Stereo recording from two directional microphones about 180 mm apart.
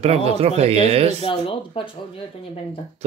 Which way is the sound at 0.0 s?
35° right (ahead or behind).